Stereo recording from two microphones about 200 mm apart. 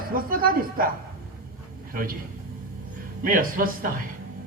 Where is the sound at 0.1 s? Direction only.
45° right (ahead or behind).